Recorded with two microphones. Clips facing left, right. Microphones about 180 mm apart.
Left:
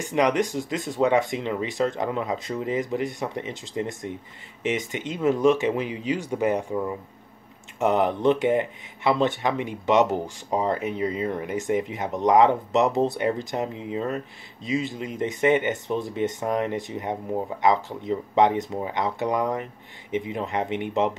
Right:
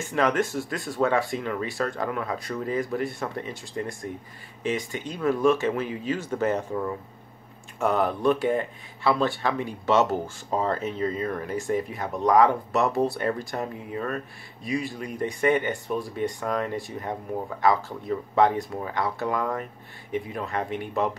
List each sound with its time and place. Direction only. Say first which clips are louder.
0.0 s speech: left 2 dB; 15° left (ahead or behind)